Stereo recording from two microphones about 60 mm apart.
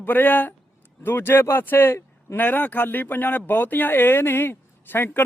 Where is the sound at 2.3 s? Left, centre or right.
Left.